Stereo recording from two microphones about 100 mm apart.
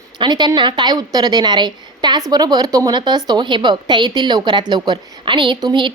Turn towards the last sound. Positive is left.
turn(degrees=-50)  # may be behind; listen again after turning